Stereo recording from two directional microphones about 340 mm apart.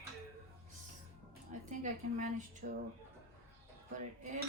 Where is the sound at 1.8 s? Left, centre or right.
Right.